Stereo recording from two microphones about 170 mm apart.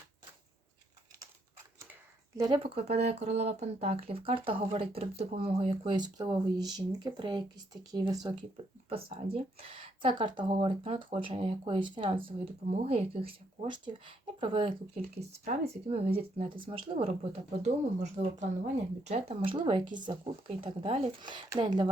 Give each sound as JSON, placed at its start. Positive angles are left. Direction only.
{"t": 2.4, "sound": "speech", "side_deg": -30}
{"t": 17.6, "sound": "speech", "side_deg": -45}